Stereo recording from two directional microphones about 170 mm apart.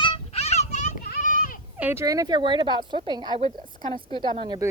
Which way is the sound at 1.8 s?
15° right (ahead or behind).